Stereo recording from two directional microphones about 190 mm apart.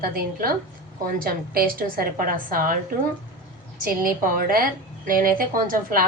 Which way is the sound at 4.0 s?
45° right (ahead or behind).